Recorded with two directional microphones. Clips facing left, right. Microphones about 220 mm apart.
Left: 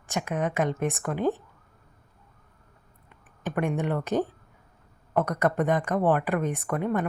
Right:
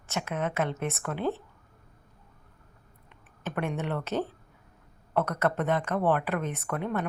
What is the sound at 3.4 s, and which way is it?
Speech, 15° left (ahead or behind).